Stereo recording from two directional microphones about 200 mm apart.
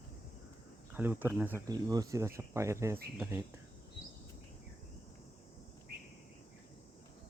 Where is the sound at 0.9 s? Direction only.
10° right (ahead or behind).